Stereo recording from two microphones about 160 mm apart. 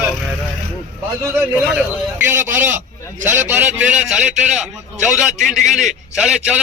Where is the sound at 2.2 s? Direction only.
15° right (ahead or behind).